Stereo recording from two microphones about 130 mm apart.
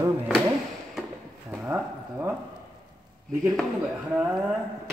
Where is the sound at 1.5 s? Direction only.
15° right (ahead or behind).